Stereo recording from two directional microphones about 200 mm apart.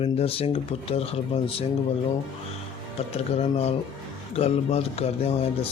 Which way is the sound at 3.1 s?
30° left (ahead or behind).